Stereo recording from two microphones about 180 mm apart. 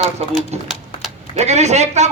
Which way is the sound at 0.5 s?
35° right (ahead or behind).